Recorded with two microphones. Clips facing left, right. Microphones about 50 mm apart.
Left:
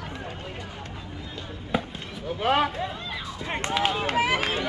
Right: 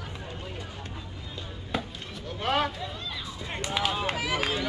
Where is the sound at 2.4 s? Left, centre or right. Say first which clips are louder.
Left 4 dB; centre.